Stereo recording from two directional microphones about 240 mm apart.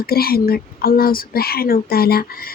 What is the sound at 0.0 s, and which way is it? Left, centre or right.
Speech, left.